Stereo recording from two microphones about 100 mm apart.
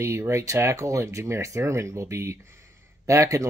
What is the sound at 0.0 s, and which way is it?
Speech, 30° right (ahead or behind).